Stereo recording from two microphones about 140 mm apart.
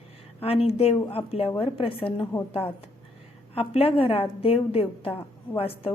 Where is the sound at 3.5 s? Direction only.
45° left (ahead or behind).